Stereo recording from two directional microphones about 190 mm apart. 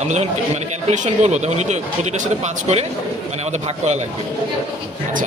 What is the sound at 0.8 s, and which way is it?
Speech, 35° right (ahead or behind).